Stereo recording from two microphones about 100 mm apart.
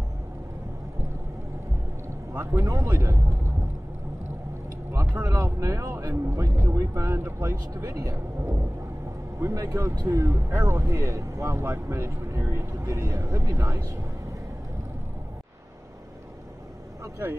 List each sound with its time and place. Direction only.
2.3 s speech: 25° right (ahead or behind)
5.0 s speech: 25° right (ahead or behind)
7.7 s speech: 30° right (ahead or behind)
17.0 s speech: 25° right (ahead or behind)